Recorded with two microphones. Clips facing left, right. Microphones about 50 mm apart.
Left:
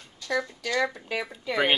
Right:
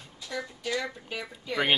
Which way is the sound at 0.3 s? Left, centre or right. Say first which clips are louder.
Left 5 dB; left.